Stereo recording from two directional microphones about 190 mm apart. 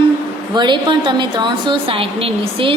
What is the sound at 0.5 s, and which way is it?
A woman's voice, 25° right (ahead or behind).